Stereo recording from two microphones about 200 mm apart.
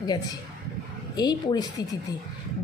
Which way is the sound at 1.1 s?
20° left (ahead or behind).